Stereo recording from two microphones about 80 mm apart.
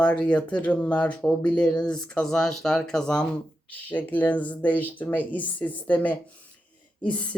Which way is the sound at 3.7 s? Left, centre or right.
Left.